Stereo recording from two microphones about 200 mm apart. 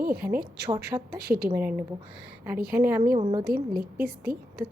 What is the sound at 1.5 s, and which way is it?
A woman's voice, 10° right (ahead or behind).